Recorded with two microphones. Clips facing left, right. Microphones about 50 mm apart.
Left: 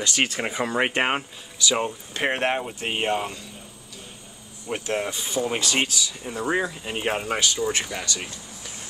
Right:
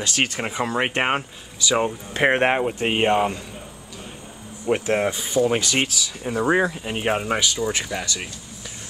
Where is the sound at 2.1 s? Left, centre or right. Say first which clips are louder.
Right 6 dB; right.